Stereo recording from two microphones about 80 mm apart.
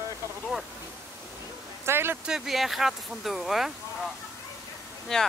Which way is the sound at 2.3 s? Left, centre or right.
Centre.